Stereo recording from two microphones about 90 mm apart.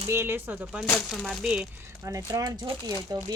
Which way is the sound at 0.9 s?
Centre (ahead or behind).